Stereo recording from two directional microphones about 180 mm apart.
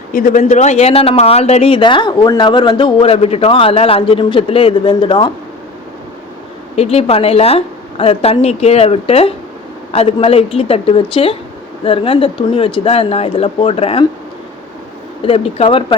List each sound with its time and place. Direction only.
0.1 s speech: 50° left (ahead or behind); by 5.3 s 30° left (ahead or behind)
6.7 s speech: 35° left (ahead or behind)
15.2 s speech: 30° left (ahead or behind)